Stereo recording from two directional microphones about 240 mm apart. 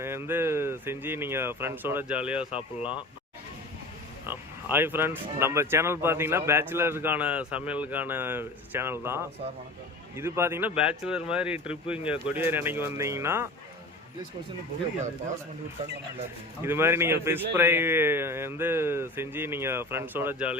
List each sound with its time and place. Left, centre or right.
0.0 s speech: centre
2.5 s speech: left
4.3 s speech: centre
16.6 s speech: centre